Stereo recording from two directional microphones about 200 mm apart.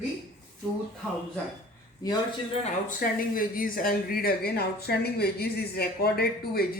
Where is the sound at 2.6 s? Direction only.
40° left (ahead or behind).